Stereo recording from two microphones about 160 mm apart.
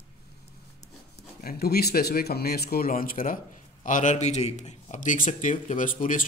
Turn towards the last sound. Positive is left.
turn(degrees=55)  # may be behind; listen again after turning